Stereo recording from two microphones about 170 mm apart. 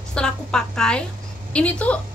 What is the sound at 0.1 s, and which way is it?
A woman's voice, 5° left (ahead or behind).